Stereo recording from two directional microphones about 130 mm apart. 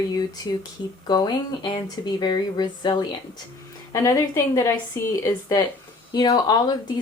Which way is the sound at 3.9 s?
25° left (ahead or behind).